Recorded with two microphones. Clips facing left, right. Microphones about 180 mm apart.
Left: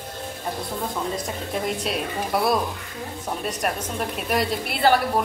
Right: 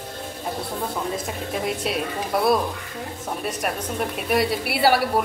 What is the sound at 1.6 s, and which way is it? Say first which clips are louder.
Speech: right 2 dB; centre (ahead or behind).